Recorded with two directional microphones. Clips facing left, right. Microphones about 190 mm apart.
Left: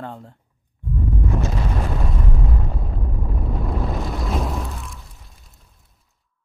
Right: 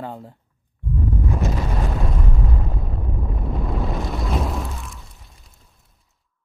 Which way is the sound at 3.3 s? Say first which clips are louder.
Left 1 dB; centre (ahead or behind).